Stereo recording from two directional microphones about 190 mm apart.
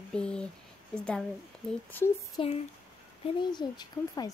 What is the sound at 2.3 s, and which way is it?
Speech, 30° left (ahead or behind).